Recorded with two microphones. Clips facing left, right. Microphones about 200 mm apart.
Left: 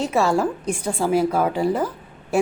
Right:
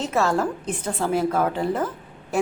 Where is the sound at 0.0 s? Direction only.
10° left (ahead or behind).